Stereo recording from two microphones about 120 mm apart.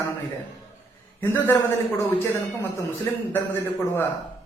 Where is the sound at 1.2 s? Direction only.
20° left (ahead or behind).